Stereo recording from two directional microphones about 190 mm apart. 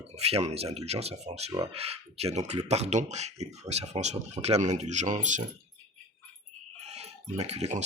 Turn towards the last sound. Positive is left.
turn(degrees=-35)  # may be behind; listen again after turning